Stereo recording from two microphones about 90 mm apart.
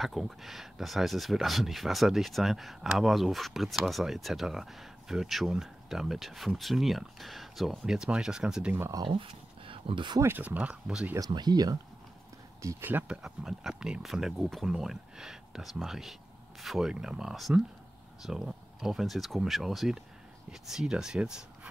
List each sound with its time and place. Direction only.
0.0 s speech: centre (ahead or behind)
9.0 s speech: 75° right (ahead or behind)
10.2 s speech: 20° right (ahead or behind)
11.1 s speech: 45° right (ahead or behind)
12.8 s speech: 20° right (ahead or behind)
13.2 s speech: 5° right (ahead or behind)